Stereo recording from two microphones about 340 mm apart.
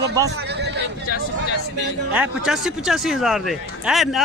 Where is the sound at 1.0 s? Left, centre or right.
Left.